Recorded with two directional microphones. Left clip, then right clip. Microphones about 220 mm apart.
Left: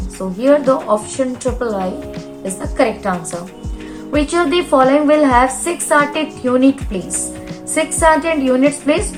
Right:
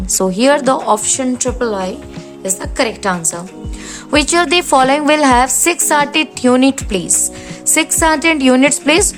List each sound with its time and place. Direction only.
0.2 s a woman's voice: 50° right (ahead or behind)
4.1 s a woman's voice: 50° right (ahead or behind)